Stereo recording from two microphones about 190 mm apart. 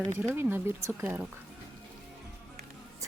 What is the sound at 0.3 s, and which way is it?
Speech, 10° right (ahead or behind).